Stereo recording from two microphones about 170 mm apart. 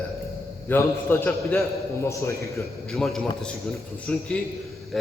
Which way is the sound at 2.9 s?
Centre (ahead or behind).